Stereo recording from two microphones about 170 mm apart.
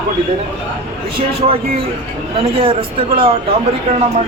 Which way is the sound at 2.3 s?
35° right (ahead or behind).